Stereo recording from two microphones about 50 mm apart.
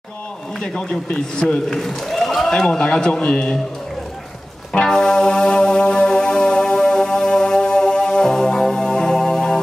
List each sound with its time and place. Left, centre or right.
0.6 s a man's voice: centre
1.8 s a man's voice: centre
4.7 s music: centre